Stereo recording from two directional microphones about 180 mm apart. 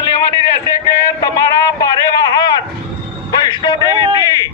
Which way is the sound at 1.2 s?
20° left (ahead or behind).